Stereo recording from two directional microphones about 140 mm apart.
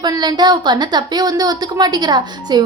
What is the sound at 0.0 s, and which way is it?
A woman's voice, 30° right (ahead or behind).